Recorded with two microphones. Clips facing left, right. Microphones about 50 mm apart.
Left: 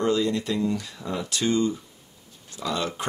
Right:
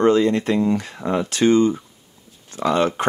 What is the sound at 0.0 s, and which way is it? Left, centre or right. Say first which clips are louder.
Speech: right 7 dB; right.